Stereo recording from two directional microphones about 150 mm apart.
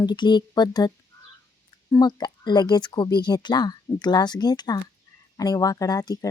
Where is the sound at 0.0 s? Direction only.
30° left (ahead or behind).